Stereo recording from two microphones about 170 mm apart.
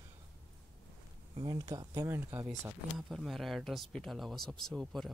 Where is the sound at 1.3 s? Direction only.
25° right (ahead or behind).